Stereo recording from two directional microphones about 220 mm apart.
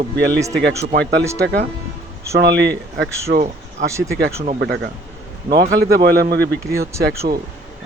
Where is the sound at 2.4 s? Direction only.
50° right (ahead or behind).